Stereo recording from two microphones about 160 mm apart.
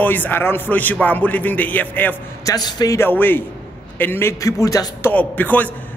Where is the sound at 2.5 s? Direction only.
25° left (ahead or behind).